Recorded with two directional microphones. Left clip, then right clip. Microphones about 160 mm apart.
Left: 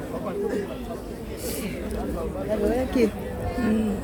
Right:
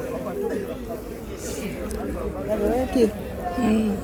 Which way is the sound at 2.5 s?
10° right (ahead or behind).